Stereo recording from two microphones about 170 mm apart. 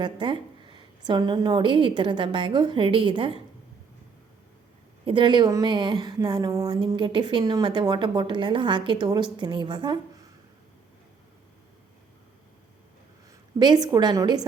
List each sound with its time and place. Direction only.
0.0 s a woman's voice: 30° right (ahead or behind)
5.0 s a woman's voice: 30° right (ahead or behind)
13.6 s a woman's voice: 25° right (ahead or behind)